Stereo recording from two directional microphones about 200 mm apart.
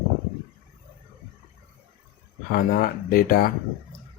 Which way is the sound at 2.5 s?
45° left (ahead or behind).